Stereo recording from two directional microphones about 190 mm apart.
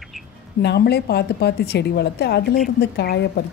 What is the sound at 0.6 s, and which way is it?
A woman's voice, 60° left (ahead or behind).